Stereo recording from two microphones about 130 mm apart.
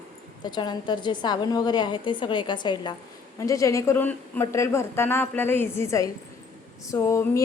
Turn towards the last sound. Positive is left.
turn(degrees=20)  # may be behind; listen again after turning